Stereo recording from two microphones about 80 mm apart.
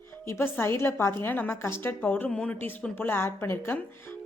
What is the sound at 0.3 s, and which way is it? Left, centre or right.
A woman's voice, left.